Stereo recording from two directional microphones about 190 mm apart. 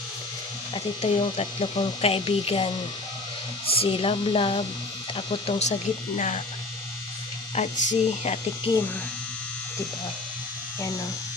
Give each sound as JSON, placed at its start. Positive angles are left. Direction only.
{"t": 0.7, "sound": "speech", "side_deg": 30}
{"t": 7.5, "sound": "speech", "side_deg": 40}